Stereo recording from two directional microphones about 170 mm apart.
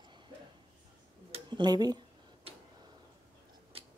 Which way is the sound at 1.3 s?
30° right (ahead or behind).